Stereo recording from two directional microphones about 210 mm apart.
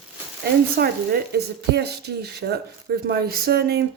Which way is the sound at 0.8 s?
50° right (ahead or behind).